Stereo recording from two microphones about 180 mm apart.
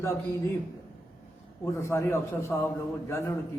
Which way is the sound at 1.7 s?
15° left (ahead or behind).